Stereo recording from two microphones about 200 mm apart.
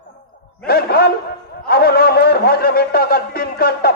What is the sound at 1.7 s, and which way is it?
A man's voice, 50° left (ahead or behind).